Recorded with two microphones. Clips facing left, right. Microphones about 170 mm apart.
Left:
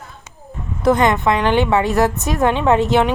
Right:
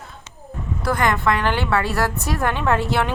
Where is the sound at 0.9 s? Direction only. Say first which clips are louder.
Left 6 dB; 20° left (ahead or behind).